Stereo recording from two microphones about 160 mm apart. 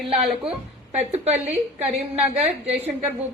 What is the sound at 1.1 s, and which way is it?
Speech, 45° right (ahead or behind).